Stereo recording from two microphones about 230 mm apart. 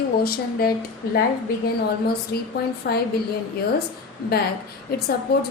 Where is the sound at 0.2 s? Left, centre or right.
Left.